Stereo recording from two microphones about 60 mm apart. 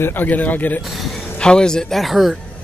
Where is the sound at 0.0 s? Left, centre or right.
Left.